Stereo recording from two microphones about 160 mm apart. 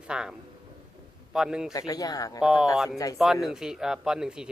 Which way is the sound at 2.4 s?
5° right (ahead or behind).